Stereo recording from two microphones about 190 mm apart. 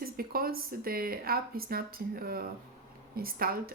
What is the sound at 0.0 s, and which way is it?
Speech, 50° right (ahead or behind).